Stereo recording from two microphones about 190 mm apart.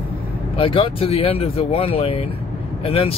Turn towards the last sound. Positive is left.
turn(degrees=30)  # may be behind; listen again after turning